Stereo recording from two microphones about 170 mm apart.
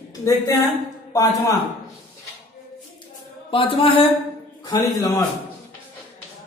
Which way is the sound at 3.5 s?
30° left (ahead or behind).